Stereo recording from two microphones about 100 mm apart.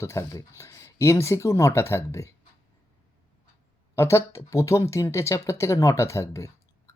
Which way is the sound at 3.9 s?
30° left (ahead or behind).